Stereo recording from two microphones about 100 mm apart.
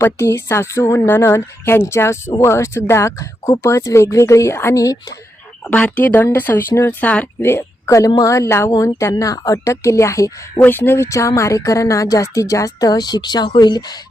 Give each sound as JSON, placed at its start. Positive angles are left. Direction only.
{"t": 0.0, "sound": "speech", "side_deg": 25}
{"t": 5.6, "sound": "a woman's voice", "side_deg": 15}
{"t": 7.4, "sound": "a woman's voice", "side_deg": 25}
{"t": 10.6, "sound": "speech", "side_deg": 20}